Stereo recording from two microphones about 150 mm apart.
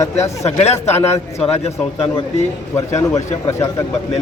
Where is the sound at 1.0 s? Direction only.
15° left (ahead or behind).